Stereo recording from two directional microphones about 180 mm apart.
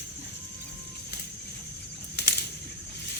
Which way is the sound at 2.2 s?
65° left (ahead or behind).